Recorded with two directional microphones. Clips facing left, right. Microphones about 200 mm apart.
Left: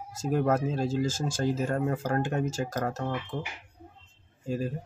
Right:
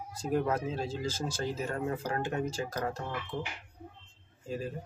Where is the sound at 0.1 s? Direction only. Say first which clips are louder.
Left 4 dB; 45° left (ahead or behind).